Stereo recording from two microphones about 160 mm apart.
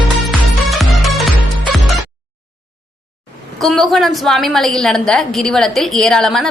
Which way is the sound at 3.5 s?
Centre (ahead or behind).